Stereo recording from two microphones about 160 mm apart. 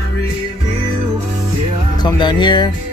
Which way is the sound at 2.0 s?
25° left (ahead or behind).